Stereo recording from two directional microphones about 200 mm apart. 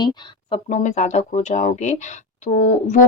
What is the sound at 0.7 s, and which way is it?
A woman's voice, 35° left (ahead or behind).